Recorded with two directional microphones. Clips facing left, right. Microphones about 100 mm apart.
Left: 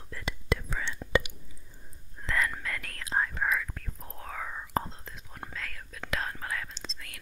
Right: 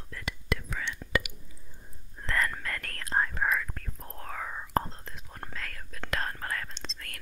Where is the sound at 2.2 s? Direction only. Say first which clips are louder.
Even; 5° left (ahead or behind).